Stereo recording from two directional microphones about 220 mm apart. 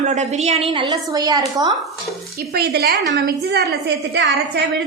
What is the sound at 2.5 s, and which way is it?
A woman's voice, 45° right (ahead or behind).